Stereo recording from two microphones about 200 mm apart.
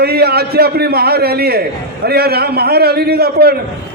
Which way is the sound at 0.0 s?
50° right (ahead or behind).